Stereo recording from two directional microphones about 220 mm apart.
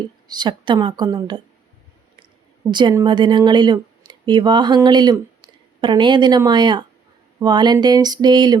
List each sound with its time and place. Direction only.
0.3 s speech: 20° right (ahead or behind)
2.6 s speech: 20° right (ahead or behind)